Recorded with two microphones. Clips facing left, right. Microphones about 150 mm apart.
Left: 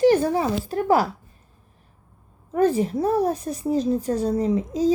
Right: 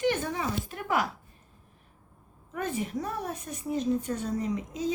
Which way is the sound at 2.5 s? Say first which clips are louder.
Left 12 dB; 35° left (ahead or behind).